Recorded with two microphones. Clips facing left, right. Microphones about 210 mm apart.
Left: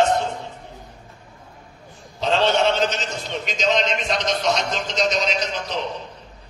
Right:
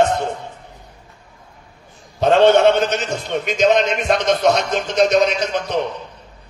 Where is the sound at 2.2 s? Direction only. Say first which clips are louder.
Right 7 dB; 55° right (ahead or behind).